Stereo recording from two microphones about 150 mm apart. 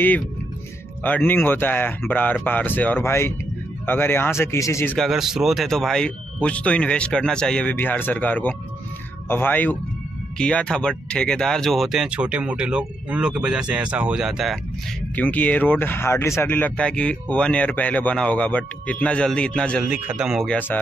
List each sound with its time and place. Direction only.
1.0 s speech: 10° left (ahead or behind)
4.9 s speech: centre (ahead or behind)
15.1 s speech: 10° left (ahead or behind)
19.9 s speech: 5° right (ahead or behind)
20.5 s speech: 10° left (ahead or behind)